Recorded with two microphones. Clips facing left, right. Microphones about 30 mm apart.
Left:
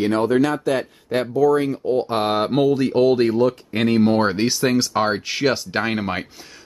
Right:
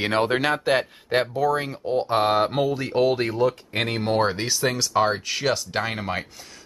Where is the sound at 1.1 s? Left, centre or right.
Centre.